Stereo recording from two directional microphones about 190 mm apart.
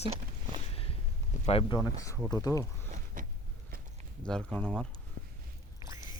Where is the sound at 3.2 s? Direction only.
45° right (ahead or behind).